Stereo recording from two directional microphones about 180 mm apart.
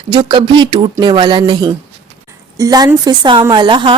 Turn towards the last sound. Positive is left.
turn(degrees=-25)  # may be behind; listen again after turning